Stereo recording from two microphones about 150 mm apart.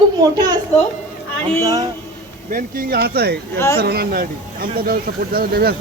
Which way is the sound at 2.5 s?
80° right.